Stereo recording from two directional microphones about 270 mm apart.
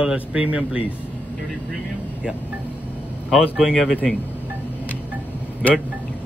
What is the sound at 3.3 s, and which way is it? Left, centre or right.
Speech, centre.